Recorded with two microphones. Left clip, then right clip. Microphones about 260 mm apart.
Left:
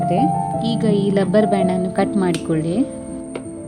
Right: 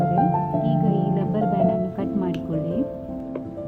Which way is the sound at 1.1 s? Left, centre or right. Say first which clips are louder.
Left 8 dB; left.